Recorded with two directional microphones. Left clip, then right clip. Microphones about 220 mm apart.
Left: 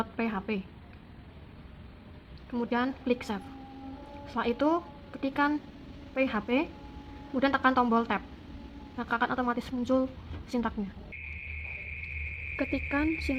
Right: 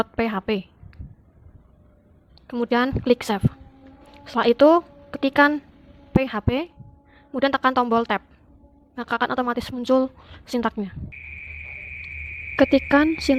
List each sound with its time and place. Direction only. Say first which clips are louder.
0.0 s speech: right 9 dB; 50° right (ahead or behind)
2.5 s a woman's voice: right 9 dB; 45° right (ahead or behind)
12.5 s speech: right 14 dB; 45° right (ahead or behind)